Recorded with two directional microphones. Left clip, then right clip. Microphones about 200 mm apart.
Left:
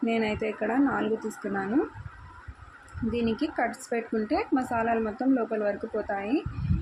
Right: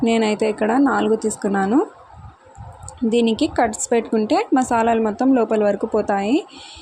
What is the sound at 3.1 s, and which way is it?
Speech, 40° right (ahead or behind).